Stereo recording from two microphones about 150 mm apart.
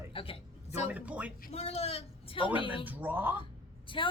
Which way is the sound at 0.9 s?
10° right (ahead or behind).